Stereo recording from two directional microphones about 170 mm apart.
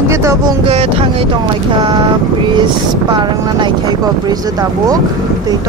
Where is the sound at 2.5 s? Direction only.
25° right (ahead or behind).